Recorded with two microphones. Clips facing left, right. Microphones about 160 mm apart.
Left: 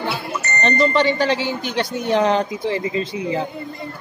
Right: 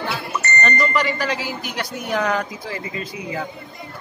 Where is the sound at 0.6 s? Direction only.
25° left (ahead or behind).